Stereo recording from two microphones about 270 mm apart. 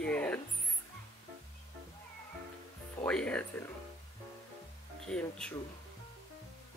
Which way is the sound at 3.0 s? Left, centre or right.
Centre.